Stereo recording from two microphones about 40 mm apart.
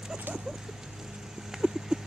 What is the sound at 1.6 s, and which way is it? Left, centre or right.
Clip-clop, centre.